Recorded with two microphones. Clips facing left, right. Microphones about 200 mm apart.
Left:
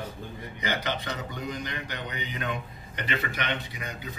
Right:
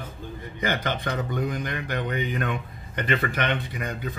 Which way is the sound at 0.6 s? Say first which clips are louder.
Right 4 dB; 50° right (ahead or behind).